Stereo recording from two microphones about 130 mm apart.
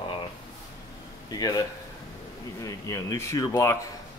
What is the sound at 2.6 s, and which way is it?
Speech, 25° left (ahead or behind).